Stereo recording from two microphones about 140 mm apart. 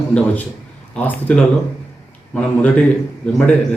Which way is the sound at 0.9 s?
10° left (ahead or behind).